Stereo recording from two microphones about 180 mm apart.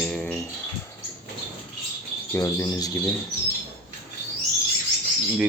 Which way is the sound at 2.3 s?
20° left (ahead or behind).